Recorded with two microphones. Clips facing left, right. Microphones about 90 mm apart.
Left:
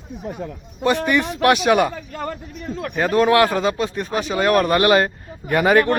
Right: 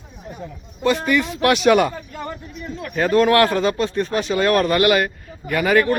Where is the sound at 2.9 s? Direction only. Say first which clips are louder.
Right 1 dB; 15° left (ahead or behind).